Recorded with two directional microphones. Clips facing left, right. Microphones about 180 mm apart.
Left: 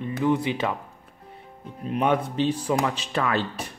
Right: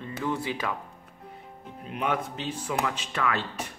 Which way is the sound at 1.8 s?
30° left (ahead or behind).